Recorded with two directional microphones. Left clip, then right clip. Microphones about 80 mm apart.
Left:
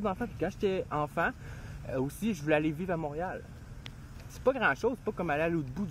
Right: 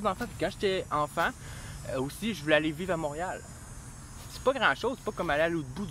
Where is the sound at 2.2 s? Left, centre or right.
Left.